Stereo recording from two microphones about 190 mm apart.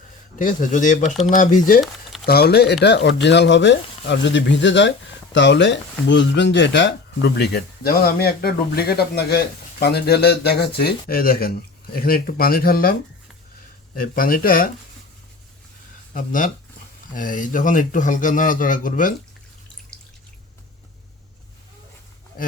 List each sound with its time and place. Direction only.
0.3 s a man's voice: 45° left (ahead or behind)
2.2 s a man's voice: 55° left (ahead or behind)
16.1 s a man's voice: 45° left (ahead or behind)